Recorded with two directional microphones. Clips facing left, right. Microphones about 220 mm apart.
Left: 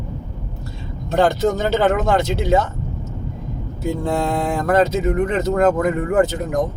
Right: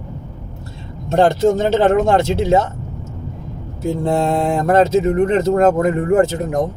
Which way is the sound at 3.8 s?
25° right (ahead or behind).